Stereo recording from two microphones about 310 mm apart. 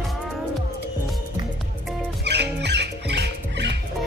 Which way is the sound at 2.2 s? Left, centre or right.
Right.